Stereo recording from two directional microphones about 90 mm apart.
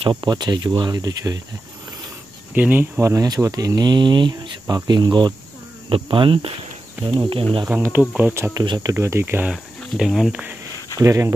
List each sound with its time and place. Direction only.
0.0 s speech: 55° right (ahead or behind)
2.5 s speech: 20° right (ahead or behind)
3.0 s speech: 35° right (ahead or behind)
3.5 s speech: 45° right (ahead or behind)
5.9 s speech: 70° right (ahead or behind)
7.7 s speech: 20° right (ahead or behind)
8.6 s speech: 45° right (ahead or behind)
8.9 s speech: 30° right (ahead or behind)
9.2 s speech: 20° right (ahead or behind)
9.5 s speech: 5° right (ahead or behind)
10.3 s speech: 20° right (ahead or behind)
11.0 s speech: 35° right (ahead or behind)